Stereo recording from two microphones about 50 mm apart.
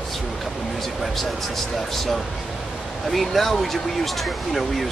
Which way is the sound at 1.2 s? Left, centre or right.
Centre.